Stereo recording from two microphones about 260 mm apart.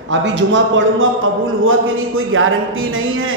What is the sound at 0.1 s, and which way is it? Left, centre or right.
A man's voice, right.